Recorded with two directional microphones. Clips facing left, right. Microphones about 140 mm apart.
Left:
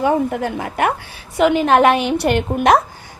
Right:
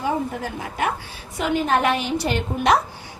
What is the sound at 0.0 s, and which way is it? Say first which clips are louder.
A woman's voice: left 7 dB; 65° left (ahead or behind).